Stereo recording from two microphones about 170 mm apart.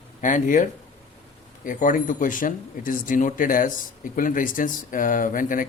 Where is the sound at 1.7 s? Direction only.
50° left (ahead or behind).